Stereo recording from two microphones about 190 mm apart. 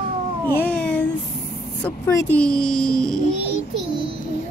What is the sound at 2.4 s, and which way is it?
Music, 5° left (ahead or behind).